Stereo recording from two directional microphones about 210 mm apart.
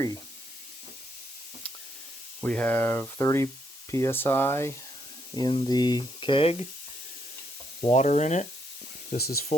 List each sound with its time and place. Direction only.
2.4 s speech: 5° left (ahead or behind)
5.4 s speech: 20° left (ahead or behind)
7.8 s sizzle: 30° left (ahead or behind)
9.0 s speech: 45° left (ahead or behind)